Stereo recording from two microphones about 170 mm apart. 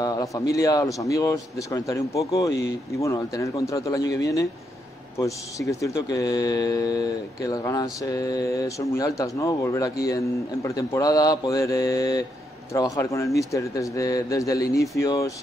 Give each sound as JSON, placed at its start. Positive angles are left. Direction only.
{"t": 0.0, "sound": "speech", "side_deg": 20}